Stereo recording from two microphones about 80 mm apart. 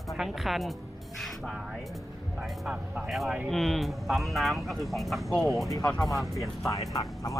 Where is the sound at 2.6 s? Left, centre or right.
Centre.